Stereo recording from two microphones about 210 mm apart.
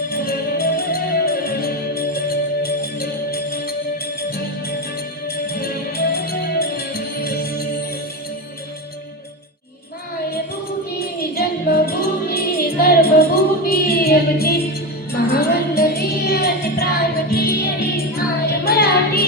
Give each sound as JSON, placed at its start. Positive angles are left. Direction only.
{"t": 0.1, "sound": "music", "side_deg": 45}
{"t": 5.5, "sound": "music", "side_deg": 45}
{"t": 11.2, "sound": "music", "side_deg": 45}